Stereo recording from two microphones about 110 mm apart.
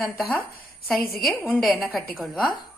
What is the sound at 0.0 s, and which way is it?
Speech, 15° left (ahead or behind).